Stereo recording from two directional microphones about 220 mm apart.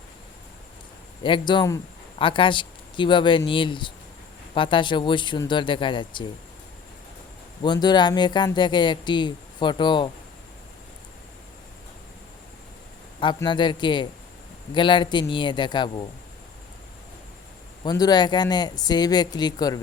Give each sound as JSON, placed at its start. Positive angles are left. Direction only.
{"t": 1.2, "sound": "speech", "side_deg": 20}
{"t": 7.6, "sound": "speech", "side_deg": 20}
{"t": 13.1, "sound": "speech", "side_deg": 20}
{"t": 17.8, "sound": "speech", "side_deg": 20}